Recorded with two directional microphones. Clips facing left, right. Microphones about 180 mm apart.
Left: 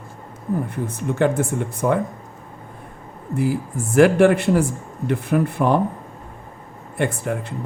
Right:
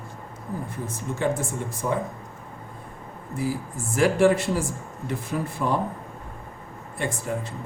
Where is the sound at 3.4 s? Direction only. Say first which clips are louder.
Left 6 dB; 60° left (ahead or behind).